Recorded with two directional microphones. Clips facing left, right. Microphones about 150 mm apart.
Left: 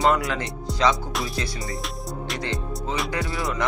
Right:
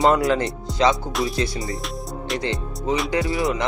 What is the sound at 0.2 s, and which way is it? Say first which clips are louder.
Music: right 8 dB; 25° right (ahead or behind).